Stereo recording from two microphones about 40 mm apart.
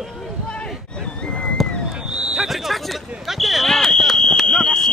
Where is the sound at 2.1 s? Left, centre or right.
Right.